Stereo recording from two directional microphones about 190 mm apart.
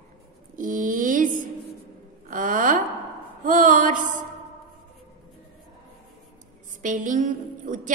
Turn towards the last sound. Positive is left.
turn(degrees=-45)  # may be behind; listen again after turning